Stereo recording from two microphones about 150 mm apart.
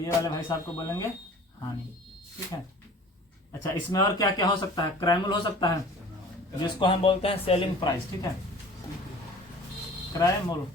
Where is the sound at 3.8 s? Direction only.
25° left (ahead or behind).